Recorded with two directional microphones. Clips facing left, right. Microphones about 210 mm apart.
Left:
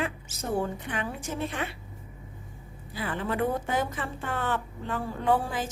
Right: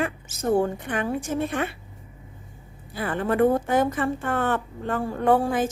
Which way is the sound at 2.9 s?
50° right (ahead or behind).